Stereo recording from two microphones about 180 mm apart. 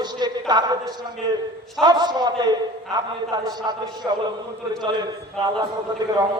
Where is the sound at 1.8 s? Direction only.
25° right (ahead or behind).